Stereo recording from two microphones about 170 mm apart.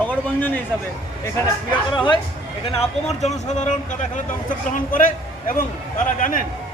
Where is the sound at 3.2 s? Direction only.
45° left (ahead or behind).